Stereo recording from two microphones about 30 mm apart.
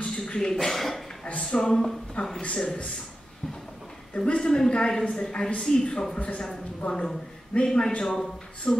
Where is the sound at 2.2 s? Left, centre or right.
Left.